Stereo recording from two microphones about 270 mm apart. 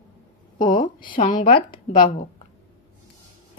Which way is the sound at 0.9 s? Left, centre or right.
Centre.